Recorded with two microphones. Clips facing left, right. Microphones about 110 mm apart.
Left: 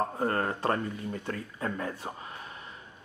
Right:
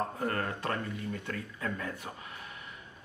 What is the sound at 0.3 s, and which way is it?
Speech, 30° left (ahead or behind).